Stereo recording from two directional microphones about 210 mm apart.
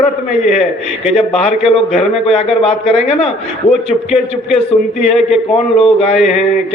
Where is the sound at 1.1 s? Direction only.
30° left (ahead or behind).